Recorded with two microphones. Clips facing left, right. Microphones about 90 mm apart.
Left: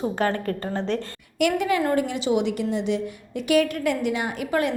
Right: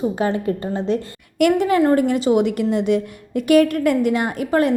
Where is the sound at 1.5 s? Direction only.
40° right (ahead or behind).